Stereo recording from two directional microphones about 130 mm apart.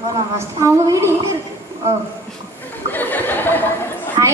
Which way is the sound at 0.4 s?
25° right (ahead or behind).